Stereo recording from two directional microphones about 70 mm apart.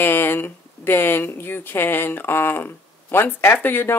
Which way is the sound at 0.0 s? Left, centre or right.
Left.